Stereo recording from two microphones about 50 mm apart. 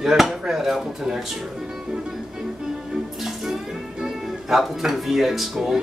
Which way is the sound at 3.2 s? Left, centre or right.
Centre.